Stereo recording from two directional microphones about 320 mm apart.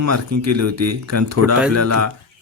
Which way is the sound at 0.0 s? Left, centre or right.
Right.